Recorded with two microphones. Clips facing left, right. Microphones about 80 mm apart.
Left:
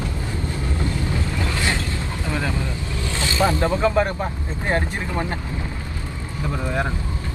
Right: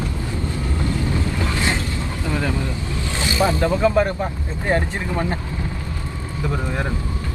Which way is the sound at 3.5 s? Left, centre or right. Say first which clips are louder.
Right 2 dB; left.